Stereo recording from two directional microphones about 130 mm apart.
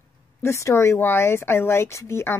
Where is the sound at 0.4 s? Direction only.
20° left (ahead or behind).